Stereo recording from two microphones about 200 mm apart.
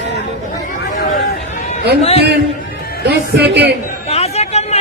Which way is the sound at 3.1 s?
55° right (ahead or behind).